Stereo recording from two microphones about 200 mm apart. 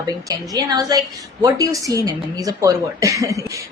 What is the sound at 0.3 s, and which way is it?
A woman's voice, 20° right (ahead or behind).